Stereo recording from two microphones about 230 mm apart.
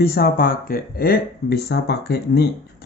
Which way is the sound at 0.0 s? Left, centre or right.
Left.